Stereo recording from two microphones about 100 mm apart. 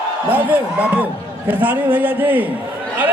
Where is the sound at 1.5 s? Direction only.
20° right (ahead or behind).